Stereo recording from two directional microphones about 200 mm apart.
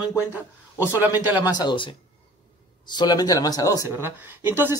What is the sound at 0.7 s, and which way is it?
Speech, 10° right (ahead or behind).